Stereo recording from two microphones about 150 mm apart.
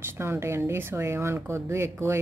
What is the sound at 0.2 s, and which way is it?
Speech, 15° right (ahead or behind).